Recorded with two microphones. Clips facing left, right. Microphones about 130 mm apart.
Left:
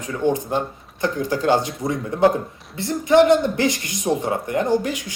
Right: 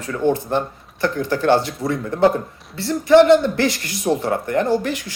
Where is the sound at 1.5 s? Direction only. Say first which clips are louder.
Right 2 dB; 15° left (ahead or behind).